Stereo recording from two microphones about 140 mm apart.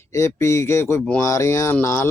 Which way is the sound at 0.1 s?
20° left (ahead or behind).